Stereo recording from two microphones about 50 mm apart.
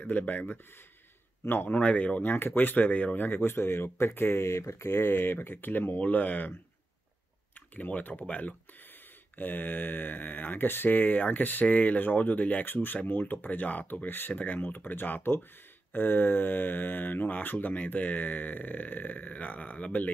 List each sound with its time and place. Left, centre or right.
0.0 s speech: left
1.4 s speech: left
1.8 s speech: left
2.2 s speech: left
7.7 s speech: left